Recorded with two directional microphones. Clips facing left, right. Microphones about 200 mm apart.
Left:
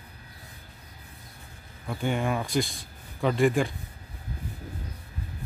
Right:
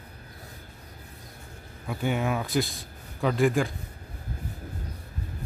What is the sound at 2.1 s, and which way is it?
Speech, 5° right (ahead or behind).